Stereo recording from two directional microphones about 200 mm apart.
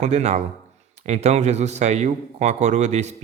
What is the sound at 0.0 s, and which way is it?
A man's voice, 35° right (ahead or behind).